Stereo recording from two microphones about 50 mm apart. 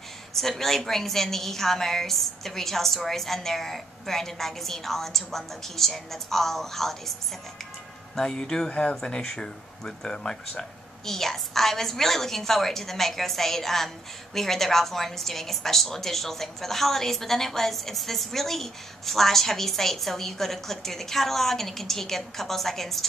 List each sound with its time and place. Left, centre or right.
0.3 s a woman's voice: centre
8.2 s a woman's voice: centre